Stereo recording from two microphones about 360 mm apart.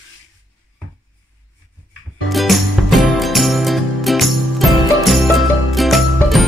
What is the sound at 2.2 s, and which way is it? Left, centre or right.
Music, centre.